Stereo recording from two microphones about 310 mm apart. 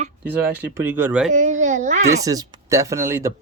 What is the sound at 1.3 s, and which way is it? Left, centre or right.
Speech, right.